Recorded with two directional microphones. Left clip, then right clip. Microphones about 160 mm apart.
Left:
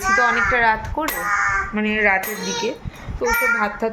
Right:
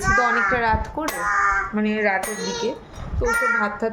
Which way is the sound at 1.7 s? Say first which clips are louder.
Left 3 dB; 10° left (ahead or behind).